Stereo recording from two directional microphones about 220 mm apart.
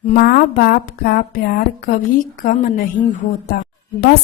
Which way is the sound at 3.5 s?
45° left (ahead or behind).